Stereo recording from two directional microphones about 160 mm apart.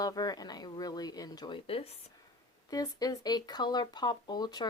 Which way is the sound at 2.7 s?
25° left (ahead or behind).